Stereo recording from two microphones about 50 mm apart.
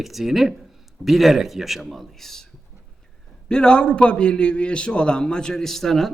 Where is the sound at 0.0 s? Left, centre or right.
Centre.